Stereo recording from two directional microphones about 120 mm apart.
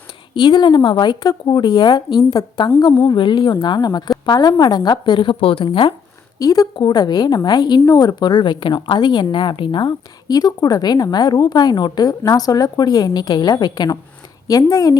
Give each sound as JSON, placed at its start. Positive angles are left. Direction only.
{"t": 0.3, "sound": "speech", "side_deg": 40}
{"t": 6.4, "sound": "speech", "side_deg": 30}